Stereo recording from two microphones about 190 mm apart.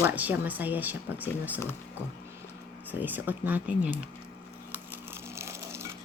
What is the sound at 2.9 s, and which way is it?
A woman's voice, 10° right (ahead or behind).